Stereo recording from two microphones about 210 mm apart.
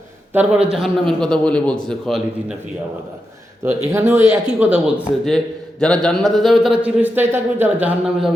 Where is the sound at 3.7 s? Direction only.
10° right (ahead or behind).